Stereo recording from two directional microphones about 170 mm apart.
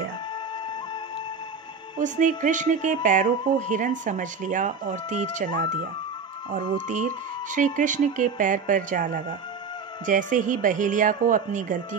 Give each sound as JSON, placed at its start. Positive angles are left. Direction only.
{"t": 2.0, "sound": "speech", "side_deg": -50}
{"t": 7.5, "sound": "speech", "side_deg": -50}